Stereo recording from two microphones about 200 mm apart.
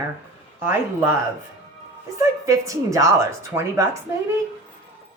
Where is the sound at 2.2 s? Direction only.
15° right (ahead or behind).